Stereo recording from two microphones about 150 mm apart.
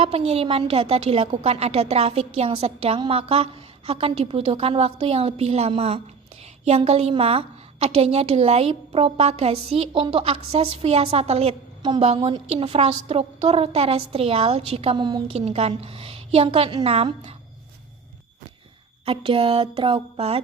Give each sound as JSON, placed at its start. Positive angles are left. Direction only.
{"t": 0.0, "sound": "a woman's voice", "side_deg": -40}
{"t": 15.4, "sound": "a woman's voice", "side_deg": -45}
{"t": 19.0, "sound": "a woman's voice", "side_deg": -35}